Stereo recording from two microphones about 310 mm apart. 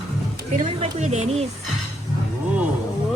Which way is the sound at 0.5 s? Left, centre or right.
Right.